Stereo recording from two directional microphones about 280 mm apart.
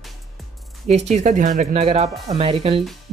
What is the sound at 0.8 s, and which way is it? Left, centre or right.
Speech, right.